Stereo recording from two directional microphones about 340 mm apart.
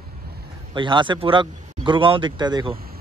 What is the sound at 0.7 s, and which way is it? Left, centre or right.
Speech, centre.